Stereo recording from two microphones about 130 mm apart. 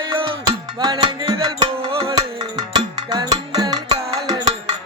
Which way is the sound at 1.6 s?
45° right (ahead or behind).